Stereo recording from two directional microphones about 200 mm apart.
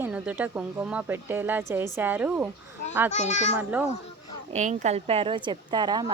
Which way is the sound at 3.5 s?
10° right (ahead or behind).